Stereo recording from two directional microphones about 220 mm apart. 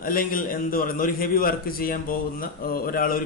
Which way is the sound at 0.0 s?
40° left (ahead or behind).